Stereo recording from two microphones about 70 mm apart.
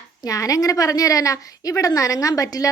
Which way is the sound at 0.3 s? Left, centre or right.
Left.